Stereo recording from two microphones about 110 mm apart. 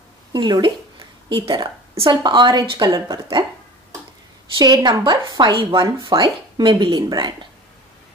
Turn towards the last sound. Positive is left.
turn(degrees=-40)  # may be behind; listen again after turning